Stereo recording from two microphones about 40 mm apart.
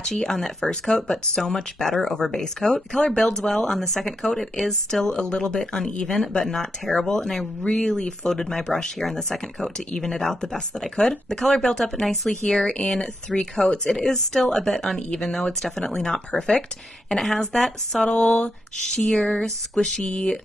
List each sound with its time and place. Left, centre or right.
0.0 s speech: centre
11.7 s speech: centre
12.5 s speech: centre
15.0 s speech: left
15.6 s speech: centre
17.1 s speech: centre
18.1 s speech: left
19.1 s speech: left